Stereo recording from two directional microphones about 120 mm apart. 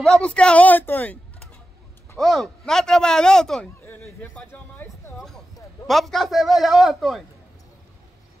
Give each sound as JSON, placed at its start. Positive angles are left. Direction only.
{"t": 0.0, "sound": "a woman's voice", "side_deg": 5}
{"t": 2.1, "sound": "a man's voice", "side_deg": 0}
{"t": 3.8, "sound": "a sound", "side_deg": 15}
{"t": 5.9, "sound": "a man's voice", "side_deg": 0}